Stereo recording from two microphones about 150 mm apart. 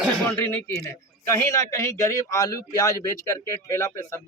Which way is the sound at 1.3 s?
20° left (ahead or behind).